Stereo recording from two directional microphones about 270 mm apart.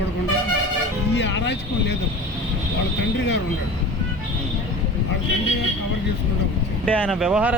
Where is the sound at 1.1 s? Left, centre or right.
Left.